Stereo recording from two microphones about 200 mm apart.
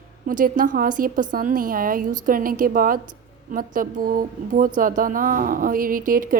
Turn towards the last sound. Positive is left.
turn(degrees=-45)  # may be behind; listen again after turning